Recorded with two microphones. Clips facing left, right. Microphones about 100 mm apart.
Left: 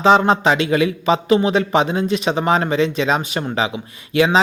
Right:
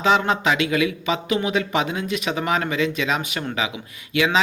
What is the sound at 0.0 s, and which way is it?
Speech, 35° left (ahead or behind).